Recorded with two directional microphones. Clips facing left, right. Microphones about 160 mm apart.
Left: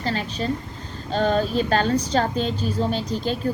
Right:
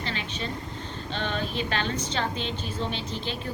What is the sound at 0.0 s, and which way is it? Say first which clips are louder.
A woman's voice: left 7 dB; 40° left (ahead or behind).